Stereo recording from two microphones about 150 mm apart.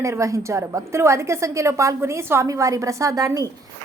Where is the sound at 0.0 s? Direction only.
20° right (ahead or behind).